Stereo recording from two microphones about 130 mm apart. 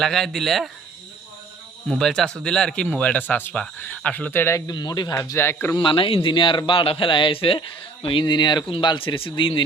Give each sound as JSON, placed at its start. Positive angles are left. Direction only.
{"t": 0.0, "sound": "speech", "side_deg": 0}
{"t": 1.9, "sound": "speech", "side_deg": 5}
{"t": 4.7, "sound": "speech", "side_deg": 35}
{"t": 5.7, "sound": "a man's voice", "side_deg": 40}